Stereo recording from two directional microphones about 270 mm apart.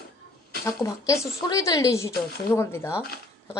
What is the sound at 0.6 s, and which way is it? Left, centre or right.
Speech, centre.